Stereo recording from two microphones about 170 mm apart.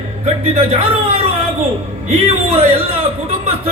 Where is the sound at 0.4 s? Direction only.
35° right (ahead or behind).